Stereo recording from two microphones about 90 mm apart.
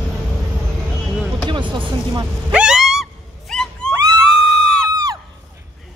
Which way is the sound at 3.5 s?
10° left (ahead or behind).